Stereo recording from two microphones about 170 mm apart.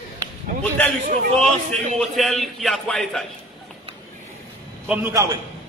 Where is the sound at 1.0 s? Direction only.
50° right (ahead or behind).